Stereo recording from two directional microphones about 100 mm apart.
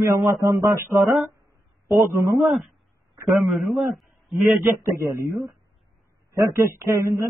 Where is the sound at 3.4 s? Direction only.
Centre (ahead or behind).